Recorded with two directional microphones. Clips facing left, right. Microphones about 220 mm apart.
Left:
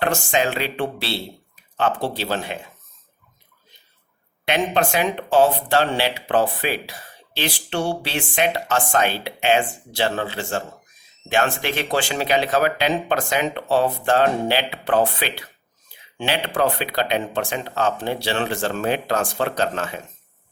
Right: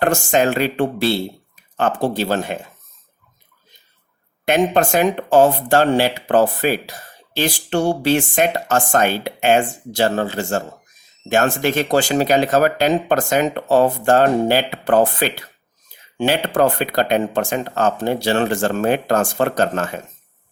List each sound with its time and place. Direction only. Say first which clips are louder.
0.0 s speech: right 5 dB; 45° right (ahead or behind)
4.4 s speech: right 5 dB; 45° right (ahead or behind)